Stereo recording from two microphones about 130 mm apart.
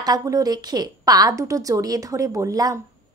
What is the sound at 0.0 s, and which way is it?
A woman's voice, 30° right (ahead or behind).